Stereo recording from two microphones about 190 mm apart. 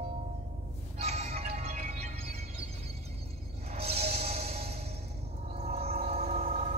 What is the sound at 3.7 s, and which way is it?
Music, 35° right (ahead or behind).